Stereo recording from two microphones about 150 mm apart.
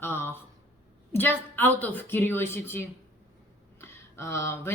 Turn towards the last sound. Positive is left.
turn(degrees=20)  # may be behind; listen again after turning